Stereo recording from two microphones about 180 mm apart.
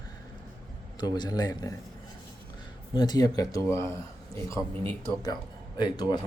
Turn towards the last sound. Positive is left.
turn(degrees=25)  # may be behind; listen again after turning